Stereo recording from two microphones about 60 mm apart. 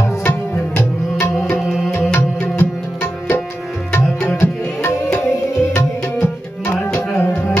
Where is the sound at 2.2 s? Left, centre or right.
Left.